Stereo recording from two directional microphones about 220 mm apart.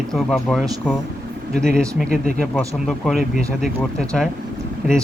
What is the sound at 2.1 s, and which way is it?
Speech, 45° right (ahead or behind).